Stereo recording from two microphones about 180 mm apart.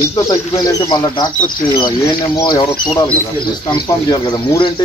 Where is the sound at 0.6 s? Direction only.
20° left (ahead or behind).